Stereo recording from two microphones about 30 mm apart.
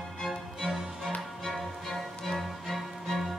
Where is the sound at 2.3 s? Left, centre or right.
Centre.